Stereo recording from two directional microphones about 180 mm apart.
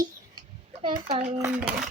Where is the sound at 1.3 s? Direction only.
15° right (ahead or behind).